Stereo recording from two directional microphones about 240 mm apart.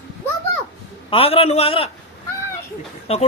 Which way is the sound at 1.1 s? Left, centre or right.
Left.